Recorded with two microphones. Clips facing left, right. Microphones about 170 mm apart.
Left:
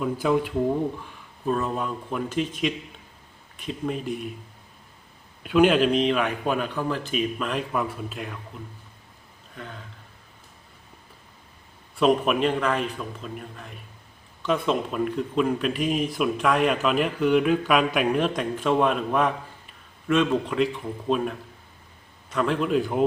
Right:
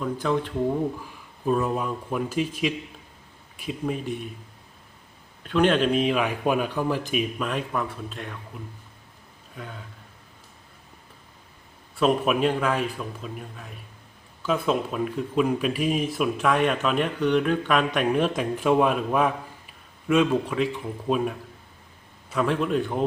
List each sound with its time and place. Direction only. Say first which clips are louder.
0.0 s a man's voice: left 2 dB; 10° left (ahead or behind)
1.0 s speech: right 1 dB; 5° right (ahead or behind)
5.4 s a man's voice: left 2 dB; 10° left (ahead or behind)
5.9 s speech: even; 5° right (ahead or behind)
11.9 s speech: left 1 dB; centre (ahead or behind)